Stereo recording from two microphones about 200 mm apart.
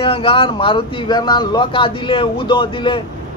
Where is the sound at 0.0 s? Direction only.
25° left (ahead or behind).